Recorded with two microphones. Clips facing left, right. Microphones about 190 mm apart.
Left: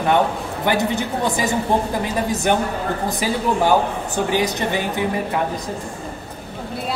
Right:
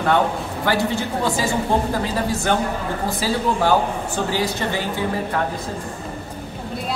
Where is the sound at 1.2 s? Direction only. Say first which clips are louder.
Left 1 dB; 20° left (ahead or behind).